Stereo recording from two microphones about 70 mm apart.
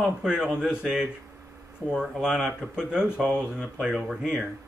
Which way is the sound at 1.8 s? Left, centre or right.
Right.